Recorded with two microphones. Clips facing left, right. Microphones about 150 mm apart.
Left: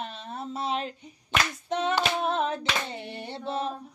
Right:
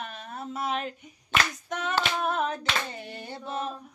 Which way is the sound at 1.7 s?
25° left (ahead or behind).